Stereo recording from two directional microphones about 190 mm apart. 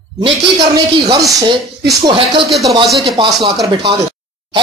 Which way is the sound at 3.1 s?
25° right (ahead or behind).